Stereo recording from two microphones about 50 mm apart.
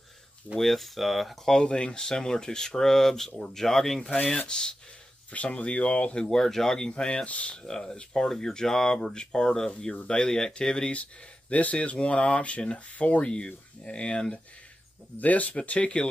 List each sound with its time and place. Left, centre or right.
0.6 s speech: centre
5.3 s speech: left
6.3 s speech: centre
15.1 s speech: left